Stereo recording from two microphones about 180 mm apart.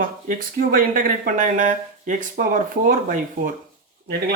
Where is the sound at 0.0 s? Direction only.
50° right (ahead or behind).